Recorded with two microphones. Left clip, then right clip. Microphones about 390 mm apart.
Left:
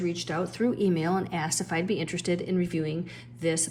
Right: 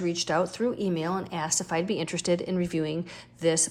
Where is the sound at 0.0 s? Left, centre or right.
Centre.